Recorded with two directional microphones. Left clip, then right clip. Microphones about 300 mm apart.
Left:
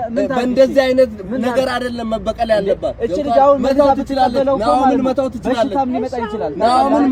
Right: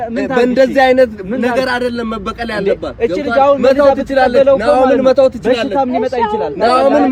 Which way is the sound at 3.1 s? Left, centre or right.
Right.